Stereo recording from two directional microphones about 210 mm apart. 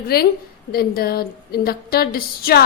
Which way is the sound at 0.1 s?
45° left (ahead or behind).